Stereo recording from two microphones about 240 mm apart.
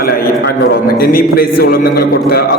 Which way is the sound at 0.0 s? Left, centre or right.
Left.